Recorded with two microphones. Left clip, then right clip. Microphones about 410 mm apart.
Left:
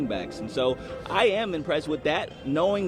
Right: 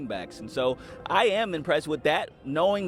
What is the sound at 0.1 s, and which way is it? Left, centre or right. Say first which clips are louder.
A man's voice: left 3 dB; right.